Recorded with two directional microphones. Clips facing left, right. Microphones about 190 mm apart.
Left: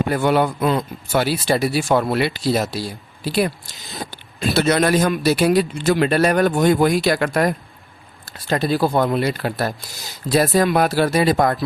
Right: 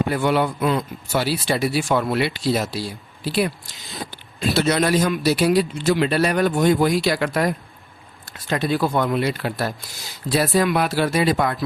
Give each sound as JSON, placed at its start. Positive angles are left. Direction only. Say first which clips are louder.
{"t": 0.1, "sound": "speech", "louder": "left 2 dB", "side_deg": 45}
{"t": 1.1, "sound": "speech", "louder": "left 3 dB", "side_deg": 55}
{"t": 3.9, "sound": "speech", "louder": "left 2 dB", "side_deg": 45}
{"t": 8.2, "sound": "speech", "louder": "left 3 dB", "side_deg": 35}